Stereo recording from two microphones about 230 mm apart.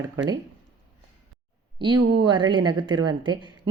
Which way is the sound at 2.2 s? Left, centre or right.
Right.